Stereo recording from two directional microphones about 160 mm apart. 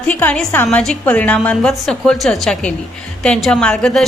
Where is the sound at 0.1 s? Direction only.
10° left (ahead or behind).